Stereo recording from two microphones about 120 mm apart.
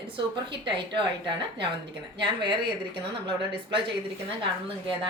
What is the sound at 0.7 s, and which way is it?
A woman's voice, 45° right (ahead or behind).